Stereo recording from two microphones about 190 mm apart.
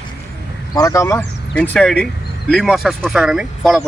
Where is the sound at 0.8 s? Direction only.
15° left (ahead or behind); by 3.7 s centre (ahead or behind).